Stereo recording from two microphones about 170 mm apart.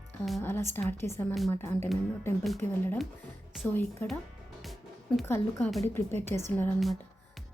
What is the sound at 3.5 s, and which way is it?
Speech, 5° right (ahead or behind).